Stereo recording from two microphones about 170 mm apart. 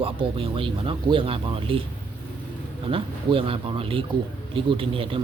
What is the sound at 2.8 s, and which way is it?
Speech, 30° right (ahead or behind).